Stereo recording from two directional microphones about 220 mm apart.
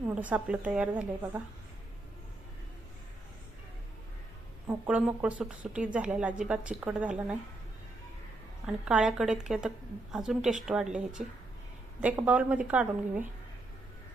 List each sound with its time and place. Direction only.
0.0 s a woman's voice: 5° right (ahead or behind)
4.6 s speech: 10° right (ahead or behind)
8.6 s a woman's voice: 5° right (ahead or behind)